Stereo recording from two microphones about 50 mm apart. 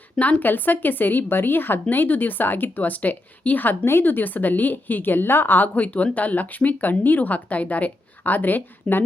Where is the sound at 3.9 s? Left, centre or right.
Left.